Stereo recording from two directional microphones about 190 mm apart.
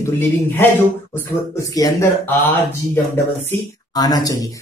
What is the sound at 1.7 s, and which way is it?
Speech, 15° left (ahead or behind).